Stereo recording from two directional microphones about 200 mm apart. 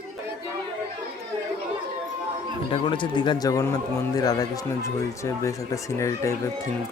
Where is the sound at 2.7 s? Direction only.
25° left (ahead or behind).